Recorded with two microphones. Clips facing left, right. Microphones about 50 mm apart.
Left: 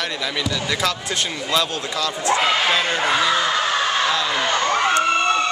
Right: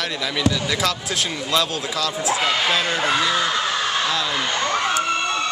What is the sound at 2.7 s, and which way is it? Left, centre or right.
Speech, centre.